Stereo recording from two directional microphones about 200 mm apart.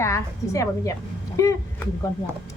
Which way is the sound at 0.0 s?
15° left (ahead or behind).